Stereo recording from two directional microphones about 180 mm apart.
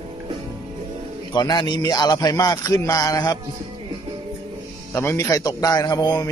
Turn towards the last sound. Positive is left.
turn(degrees=20)  # may be behind; listen again after turning